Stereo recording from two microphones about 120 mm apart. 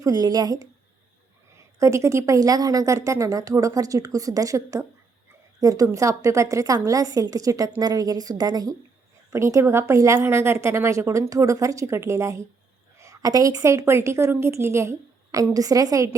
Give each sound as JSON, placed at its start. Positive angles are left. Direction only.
{"t": 0.0, "sound": "a woman's voice", "side_deg": -30}
{"t": 1.8, "sound": "a woman's voice", "side_deg": -25}